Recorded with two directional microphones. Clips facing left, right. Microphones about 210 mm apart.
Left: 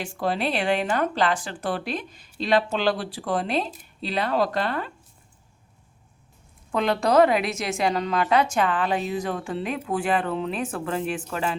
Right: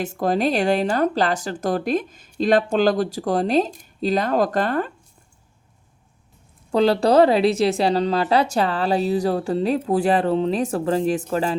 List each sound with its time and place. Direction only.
0.2 s speech: 45° right (ahead or behind)
6.7 s speech: 35° right (ahead or behind)